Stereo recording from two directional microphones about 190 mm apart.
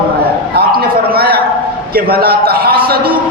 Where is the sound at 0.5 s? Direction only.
55° right (ahead or behind).